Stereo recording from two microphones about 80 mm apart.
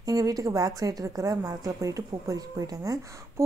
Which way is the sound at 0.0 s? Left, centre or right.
Right.